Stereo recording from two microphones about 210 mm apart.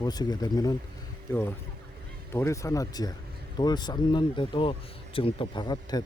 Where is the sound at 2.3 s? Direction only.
15° left (ahead or behind).